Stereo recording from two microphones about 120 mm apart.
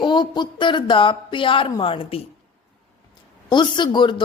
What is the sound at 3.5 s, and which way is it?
Speech, 40° left (ahead or behind).